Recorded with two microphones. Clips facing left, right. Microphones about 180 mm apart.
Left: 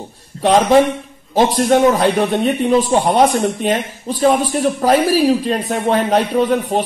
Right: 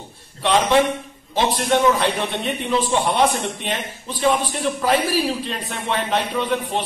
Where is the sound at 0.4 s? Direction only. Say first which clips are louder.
Left 6 dB; 40° left (ahead or behind).